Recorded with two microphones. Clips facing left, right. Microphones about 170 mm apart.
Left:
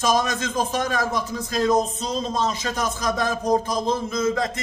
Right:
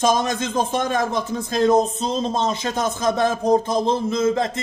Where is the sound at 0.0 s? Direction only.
25° right (ahead or behind).